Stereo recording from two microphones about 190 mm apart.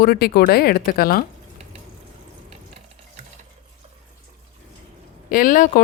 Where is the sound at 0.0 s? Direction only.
50° left (ahead or behind).